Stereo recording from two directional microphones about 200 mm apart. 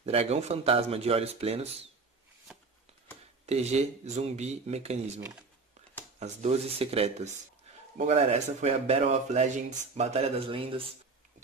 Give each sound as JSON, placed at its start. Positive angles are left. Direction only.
{"t": 0.0, "sound": "speech", "side_deg": -30}
{"t": 2.5, "sound": "a sound", "side_deg": -5}
{"t": 3.4, "sound": "speech", "side_deg": -30}